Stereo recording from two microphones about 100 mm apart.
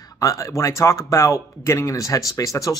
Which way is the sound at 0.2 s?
30° left (ahead or behind).